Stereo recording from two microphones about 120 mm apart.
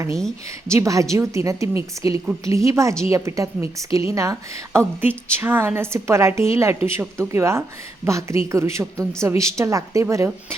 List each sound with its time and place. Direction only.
0.7 s a woman's voice: 25° right (ahead or behind)